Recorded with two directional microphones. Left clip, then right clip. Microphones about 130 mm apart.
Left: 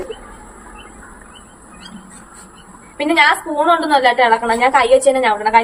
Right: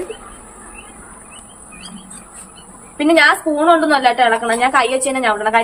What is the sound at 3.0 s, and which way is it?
A woman's voice, 20° right (ahead or behind).